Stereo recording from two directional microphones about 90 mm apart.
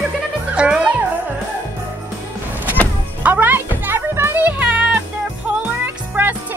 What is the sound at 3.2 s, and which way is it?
Music, 20° right (ahead or behind).